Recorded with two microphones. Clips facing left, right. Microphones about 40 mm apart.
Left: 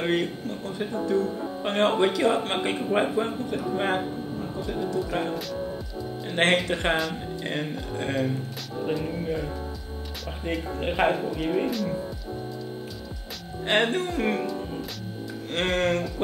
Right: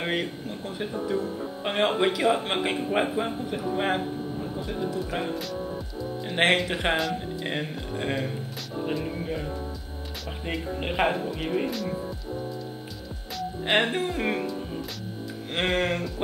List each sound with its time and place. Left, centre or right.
0.0 s speech: centre
13.7 s speech: centre
15.5 s speech: centre